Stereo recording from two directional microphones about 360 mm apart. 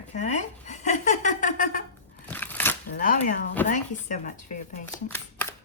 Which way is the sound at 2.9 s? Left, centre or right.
Left.